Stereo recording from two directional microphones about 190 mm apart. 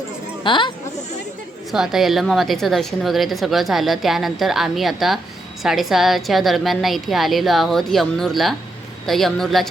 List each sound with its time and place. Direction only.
0.4 s speech: 25° left (ahead or behind)
1.7 s a woman's voice: centre (ahead or behind)